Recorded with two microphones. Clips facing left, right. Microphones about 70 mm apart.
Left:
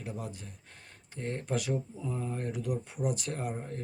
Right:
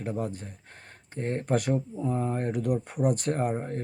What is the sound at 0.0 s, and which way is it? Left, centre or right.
Speech, right.